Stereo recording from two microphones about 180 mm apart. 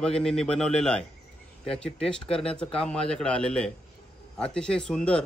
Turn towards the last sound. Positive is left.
turn(degrees=5)  # may be behind; listen again after turning